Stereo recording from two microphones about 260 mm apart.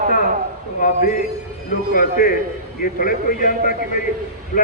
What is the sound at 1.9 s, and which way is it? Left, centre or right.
A man's voice, left.